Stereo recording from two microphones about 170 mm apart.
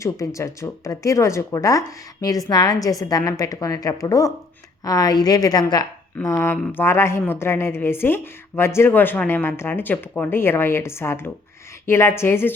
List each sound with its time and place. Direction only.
0.0 s a woman's voice: 20° left (ahead or behind)